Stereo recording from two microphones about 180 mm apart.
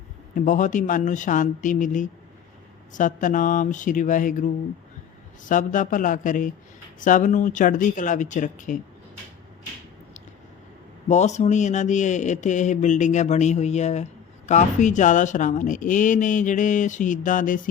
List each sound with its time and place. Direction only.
0.3 s a man's voice: 45° left (ahead or behind)
5.5 s a man's voice: 45° left (ahead or behind)
11.1 s a man's voice: 40° left (ahead or behind)